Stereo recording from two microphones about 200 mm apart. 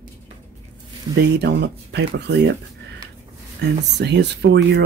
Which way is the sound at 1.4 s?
55° right (ahead or behind).